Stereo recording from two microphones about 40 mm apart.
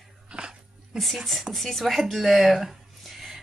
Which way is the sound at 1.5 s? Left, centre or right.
Centre.